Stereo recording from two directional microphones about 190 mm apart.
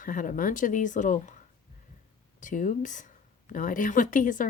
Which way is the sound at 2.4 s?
40° left (ahead or behind).